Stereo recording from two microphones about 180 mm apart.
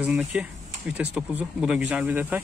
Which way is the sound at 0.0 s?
5° right (ahead or behind).